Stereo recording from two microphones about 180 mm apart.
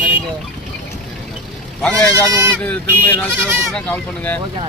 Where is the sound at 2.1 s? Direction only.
15° right (ahead or behind).